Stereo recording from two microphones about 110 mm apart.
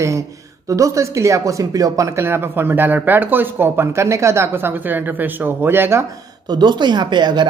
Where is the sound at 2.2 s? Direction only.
20° right (ahead or behind).